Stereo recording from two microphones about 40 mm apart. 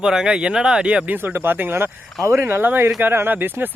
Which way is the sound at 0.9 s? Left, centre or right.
Right.